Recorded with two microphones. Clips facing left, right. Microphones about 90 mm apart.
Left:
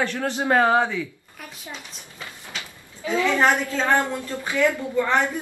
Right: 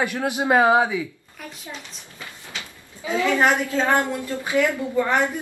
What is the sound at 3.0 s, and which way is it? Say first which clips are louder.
A man's voice: even; 15° right (ahead or behind).